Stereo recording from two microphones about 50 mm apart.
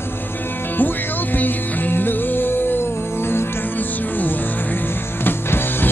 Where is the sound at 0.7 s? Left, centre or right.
Left.